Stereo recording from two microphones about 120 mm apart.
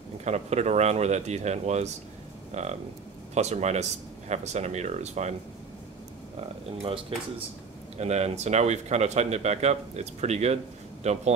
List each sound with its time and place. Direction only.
0.2 s speech: 70° right (ahead or behind)
6.8 s speech: 55° right (ahead or behind)
8.0 s speech: 70° right (ahead or behind)